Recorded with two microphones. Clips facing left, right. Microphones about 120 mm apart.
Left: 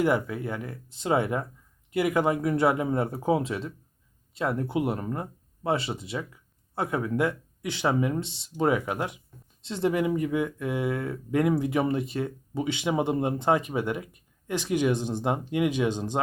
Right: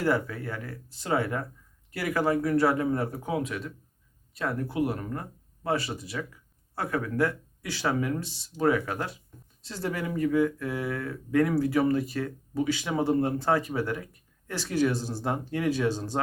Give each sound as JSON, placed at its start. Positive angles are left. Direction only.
{"t": 0.0, "sound": "speech", "side_deg": 15}